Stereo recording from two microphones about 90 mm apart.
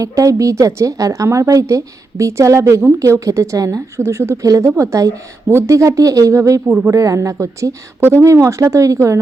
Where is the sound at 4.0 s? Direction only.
30° right (ahead or behind).